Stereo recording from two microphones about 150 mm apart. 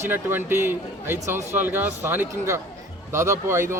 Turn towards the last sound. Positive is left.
turn(degrees=-20)  # may be behind; listen again after turning